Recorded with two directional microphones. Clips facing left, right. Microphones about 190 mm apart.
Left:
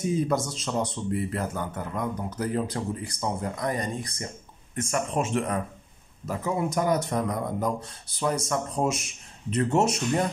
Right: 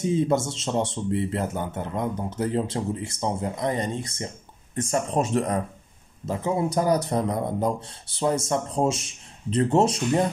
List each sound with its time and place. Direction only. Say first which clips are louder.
0.0 s speech: right 3 dB; 25° right (ahead or behind)
6.2 s speech: right 3 dB; 25° right (ahead or behind)